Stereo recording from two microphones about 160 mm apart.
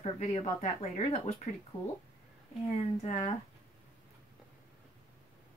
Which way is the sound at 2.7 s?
40° left (ahead or behind).